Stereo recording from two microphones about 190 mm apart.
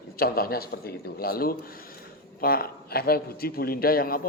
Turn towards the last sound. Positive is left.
turn(degrees=50)  # may be behind; listen again after turning